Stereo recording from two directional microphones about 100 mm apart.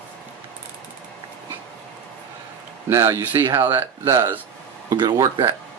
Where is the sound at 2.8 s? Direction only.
30° right (ahead or behind).